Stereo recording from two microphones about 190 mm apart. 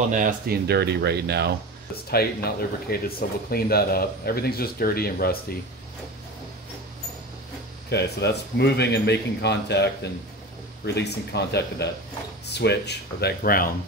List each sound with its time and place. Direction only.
0.1 s speech: 45° right (ahead or behind)
2.0 s speech: 55° left (ahead or behind)
7.9 s speech: 60° left (ahead or behind)
10.9 s speech: 60° left (ahead or behind)